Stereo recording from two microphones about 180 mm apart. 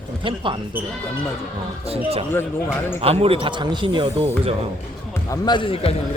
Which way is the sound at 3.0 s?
35° right (ahead or behind).